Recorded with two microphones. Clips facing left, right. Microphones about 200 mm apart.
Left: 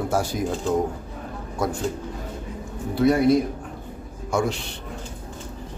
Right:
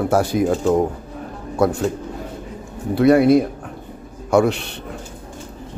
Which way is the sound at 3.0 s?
65° right (ahead or behind).